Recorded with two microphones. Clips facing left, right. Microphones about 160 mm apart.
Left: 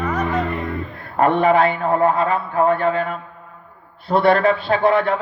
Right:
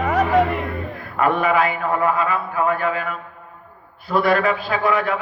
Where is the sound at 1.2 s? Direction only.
30° left (ahead or behind).